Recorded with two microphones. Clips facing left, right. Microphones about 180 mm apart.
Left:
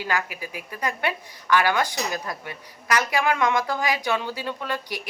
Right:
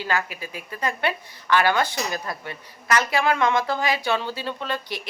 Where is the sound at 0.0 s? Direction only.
15° left (ahead or behind).